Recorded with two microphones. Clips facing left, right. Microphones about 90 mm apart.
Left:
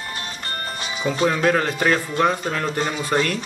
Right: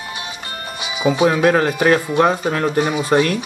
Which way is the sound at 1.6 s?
10° right (ahead or behind).